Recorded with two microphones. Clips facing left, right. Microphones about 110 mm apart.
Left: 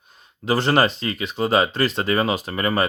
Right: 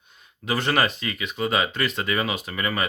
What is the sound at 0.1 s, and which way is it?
Speech, 35° left (ahead or behind).